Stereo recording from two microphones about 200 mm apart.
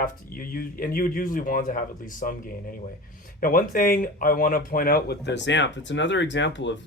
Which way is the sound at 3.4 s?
45° left (ahead or behind).